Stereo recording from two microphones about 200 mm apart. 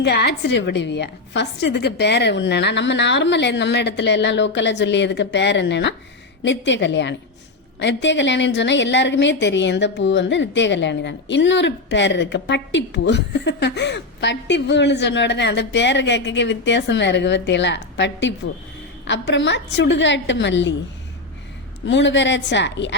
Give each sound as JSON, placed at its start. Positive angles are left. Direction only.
{"t": 0.0, "sound": "a woman's voice", "side_deg": 55}
{"t": 21.8, "sound": "a woman's voice", "side_deg": 65}